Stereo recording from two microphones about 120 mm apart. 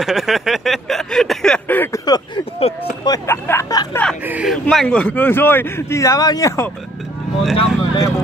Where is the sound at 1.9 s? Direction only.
35° left (ahead or behind).